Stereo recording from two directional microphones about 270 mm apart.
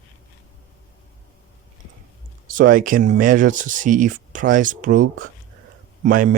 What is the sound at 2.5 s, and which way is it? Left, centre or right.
Speech, right.